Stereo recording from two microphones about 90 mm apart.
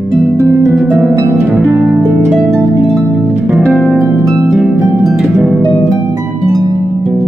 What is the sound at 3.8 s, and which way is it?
Harp, centre (ahead or behind).